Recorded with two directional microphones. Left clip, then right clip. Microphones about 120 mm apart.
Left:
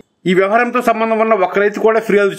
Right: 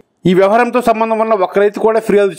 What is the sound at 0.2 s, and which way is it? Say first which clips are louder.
A man's voice: right 3 dB; 40° right (ahead or behind).